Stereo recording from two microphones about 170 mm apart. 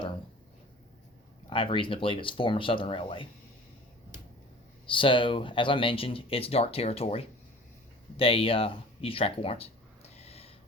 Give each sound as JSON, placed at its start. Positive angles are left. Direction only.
{"t": 1.5, "sound": "speech", "side_deg": 30}
{"t": 4.9, "sound": "speech", "side_deg": 30}